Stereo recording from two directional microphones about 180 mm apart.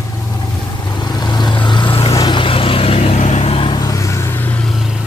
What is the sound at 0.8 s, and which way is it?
Vehicle, 20° left (ahead or behind).